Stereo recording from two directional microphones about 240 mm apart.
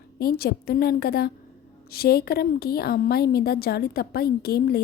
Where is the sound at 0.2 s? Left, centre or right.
Left.